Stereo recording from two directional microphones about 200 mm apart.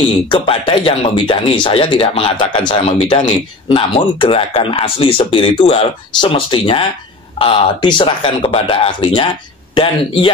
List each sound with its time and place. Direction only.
0.3 s speech: 25° left (ahead or behind)